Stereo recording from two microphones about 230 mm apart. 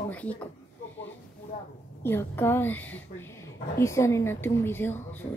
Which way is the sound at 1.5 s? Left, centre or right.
Left.